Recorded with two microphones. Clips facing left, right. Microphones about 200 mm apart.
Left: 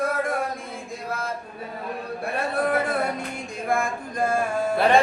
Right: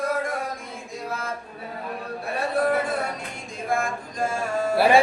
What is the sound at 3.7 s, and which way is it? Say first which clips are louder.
Mantra: left 1 dB; 55° left (ahead or behind).